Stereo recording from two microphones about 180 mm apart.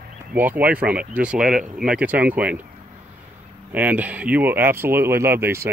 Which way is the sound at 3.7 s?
10° right (ahead or behind).